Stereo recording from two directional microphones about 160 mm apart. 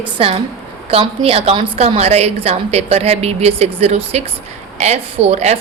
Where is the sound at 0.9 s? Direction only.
35° right (ahead or behind).